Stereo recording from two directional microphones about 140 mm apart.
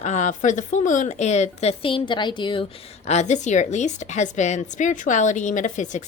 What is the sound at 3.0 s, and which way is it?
A woman's voice, 55° left (ahead or behind).